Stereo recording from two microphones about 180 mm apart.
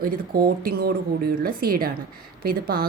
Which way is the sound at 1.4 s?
55° right (ahead or behind).